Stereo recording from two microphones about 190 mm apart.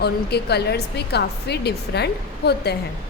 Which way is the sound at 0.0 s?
60° left (ahead or behind).